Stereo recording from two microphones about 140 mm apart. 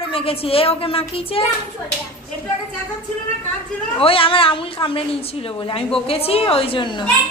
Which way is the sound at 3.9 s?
40° left (ahead or behind).